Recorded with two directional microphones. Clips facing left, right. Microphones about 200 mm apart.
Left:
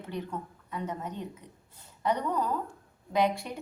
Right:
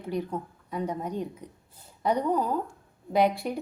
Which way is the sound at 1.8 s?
10° right (ahead or behind).